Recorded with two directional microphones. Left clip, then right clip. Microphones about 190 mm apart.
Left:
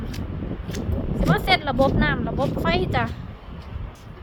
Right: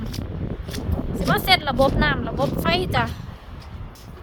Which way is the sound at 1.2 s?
10° right (ahead or behind).